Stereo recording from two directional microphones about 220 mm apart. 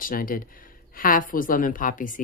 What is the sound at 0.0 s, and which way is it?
Speech, 40° left (ahead or behind).